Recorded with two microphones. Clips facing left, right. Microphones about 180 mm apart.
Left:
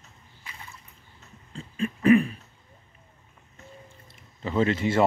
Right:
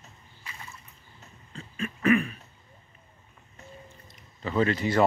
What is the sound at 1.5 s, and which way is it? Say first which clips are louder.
Throat clearing: left 5 dB; 30° left (ahead or behind).